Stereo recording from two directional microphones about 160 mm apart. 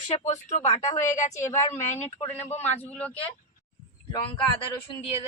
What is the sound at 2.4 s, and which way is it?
Speech, 45° left (ahead or behind).